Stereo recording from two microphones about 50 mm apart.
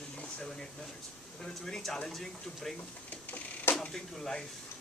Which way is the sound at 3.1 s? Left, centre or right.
Left.